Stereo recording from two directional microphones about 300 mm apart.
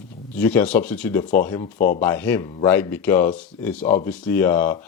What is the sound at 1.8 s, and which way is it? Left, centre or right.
Speech, left.